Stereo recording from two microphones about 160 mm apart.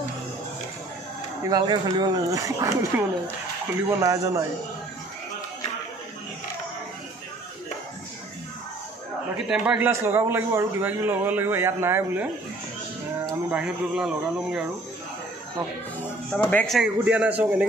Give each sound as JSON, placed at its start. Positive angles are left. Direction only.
{"t": 1.4, "sound": "speech", "side_deg": -25}
{"t": 9.5, "sound": "a man's voice", "side_deg": -10}
{"t": 13.5, "sound": "a man's voice", "side_deg": -5}
{"t": 16.0, "sound": "a man's voice", "side_deg": 10}